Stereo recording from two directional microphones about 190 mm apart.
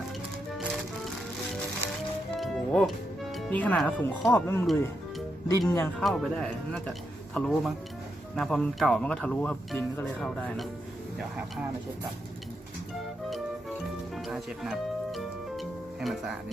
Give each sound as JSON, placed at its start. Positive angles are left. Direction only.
{"t": 2.4, "sound": "music", "side_deg": 0}
{"t": 3.3, "sound": "speech", "side_deg": 5}
{"t": 6.0, "sound": "speech", "side_deg": 0}
{"t": 14.3, "sound": "music", "side_deg": 0}